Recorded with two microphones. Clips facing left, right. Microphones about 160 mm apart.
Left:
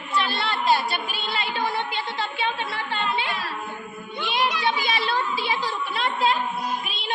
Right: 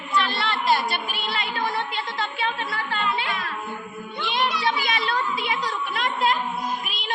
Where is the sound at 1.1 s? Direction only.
25° left (ahead or behind).